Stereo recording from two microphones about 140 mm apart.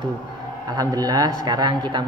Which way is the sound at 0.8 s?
25° right (ahead or behind).